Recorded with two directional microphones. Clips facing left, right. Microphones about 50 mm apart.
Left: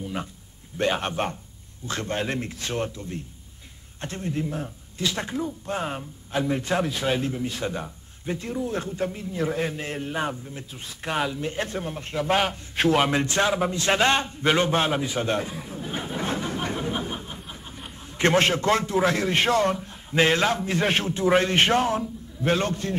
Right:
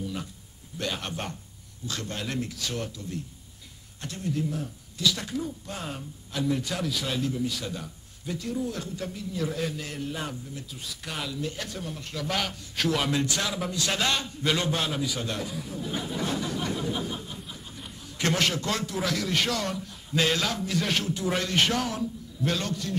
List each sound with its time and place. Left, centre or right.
0.0 s a man's voice: left